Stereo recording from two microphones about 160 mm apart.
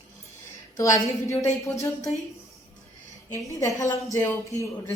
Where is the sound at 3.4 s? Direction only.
20° left (ahead or behind).